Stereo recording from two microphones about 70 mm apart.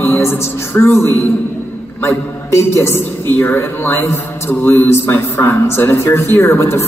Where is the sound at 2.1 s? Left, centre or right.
Left.